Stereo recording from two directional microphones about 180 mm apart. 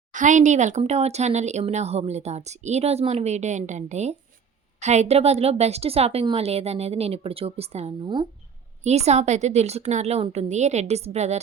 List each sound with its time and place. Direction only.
0.1 s speech: 45° right (ahead or behind); by 8.3 s 25° right (ahead or behind)
8.8 s speech: 35° right (ahead or behind)